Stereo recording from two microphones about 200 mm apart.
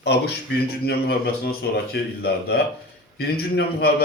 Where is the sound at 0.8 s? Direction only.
55° left (ahead or behind).